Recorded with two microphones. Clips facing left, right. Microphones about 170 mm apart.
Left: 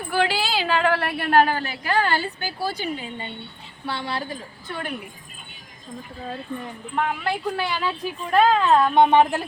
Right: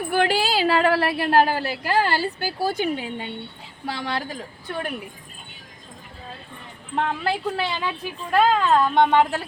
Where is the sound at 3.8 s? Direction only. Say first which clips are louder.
Right 1 dB; 90° right.